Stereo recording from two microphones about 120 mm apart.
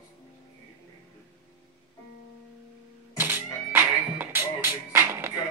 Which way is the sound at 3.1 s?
20° right (ahead or behind).